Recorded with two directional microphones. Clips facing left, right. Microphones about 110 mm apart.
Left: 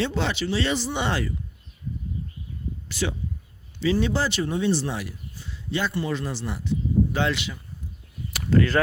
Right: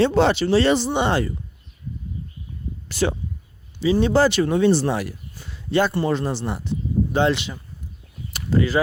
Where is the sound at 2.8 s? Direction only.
40° right (ahead or behind).